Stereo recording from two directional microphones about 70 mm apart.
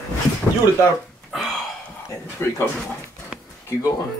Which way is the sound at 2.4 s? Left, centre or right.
Left.